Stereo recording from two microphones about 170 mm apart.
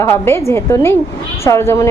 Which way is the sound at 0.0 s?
15° left (ahead or behind).